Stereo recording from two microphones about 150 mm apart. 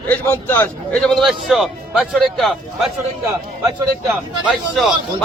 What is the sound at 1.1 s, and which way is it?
A man's voice, centre (ahead or behind).